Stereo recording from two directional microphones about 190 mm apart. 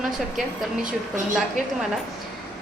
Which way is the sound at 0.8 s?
40° right (ahead or behind).